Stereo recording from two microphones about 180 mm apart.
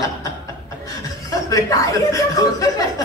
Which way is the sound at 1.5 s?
20° left (ahead or behind).